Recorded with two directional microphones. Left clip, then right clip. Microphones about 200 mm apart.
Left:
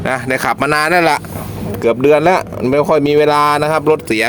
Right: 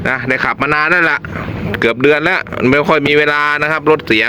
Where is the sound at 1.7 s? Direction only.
Centre (ahead or behind).